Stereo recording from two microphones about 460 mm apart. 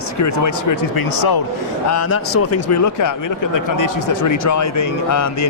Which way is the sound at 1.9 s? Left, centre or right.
Left.